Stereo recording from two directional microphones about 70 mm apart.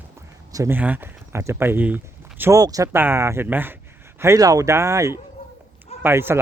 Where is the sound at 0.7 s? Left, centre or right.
Right.